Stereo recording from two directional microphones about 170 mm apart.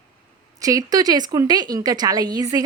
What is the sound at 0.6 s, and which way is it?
A woman's voice, 20° right (ahead or behind).